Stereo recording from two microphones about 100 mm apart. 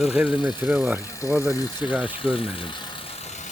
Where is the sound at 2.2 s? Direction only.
65° left (ahead or behind).